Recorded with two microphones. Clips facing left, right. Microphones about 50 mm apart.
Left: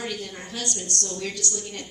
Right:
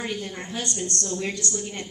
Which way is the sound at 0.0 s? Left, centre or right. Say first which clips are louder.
Right 2 dB; right.